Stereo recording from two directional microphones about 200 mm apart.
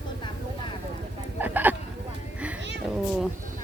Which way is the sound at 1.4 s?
10° right (ahead or behind).